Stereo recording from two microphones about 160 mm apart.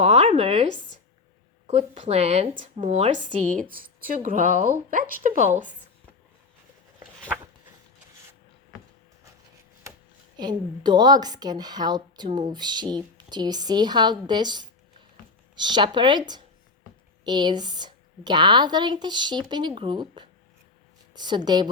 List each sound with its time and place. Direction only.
0.0 s a sound: 40° right (ahead or behind)
1.6 s a woman's voice: 40° right (ahead or behind)
10.3 s a woman's voice: 25° right (ahead or behind)